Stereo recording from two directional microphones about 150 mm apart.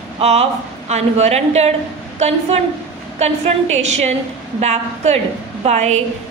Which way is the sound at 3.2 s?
50° right (ahead or behind).